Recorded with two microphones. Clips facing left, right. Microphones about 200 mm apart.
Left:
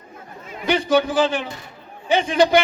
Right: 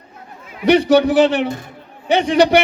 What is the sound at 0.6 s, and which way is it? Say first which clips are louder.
A man's voice: right 7 dB; 70° right (ahead or behind).